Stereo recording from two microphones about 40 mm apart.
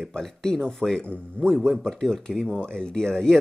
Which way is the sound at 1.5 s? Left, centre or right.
Centre.